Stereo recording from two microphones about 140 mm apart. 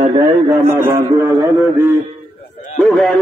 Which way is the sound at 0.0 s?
45° right (ahead or behind).